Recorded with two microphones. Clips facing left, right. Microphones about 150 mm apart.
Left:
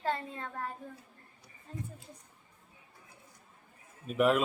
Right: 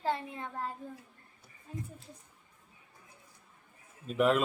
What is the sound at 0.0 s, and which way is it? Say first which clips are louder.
Speech: right 1 dB; 15° right (ahead or behind).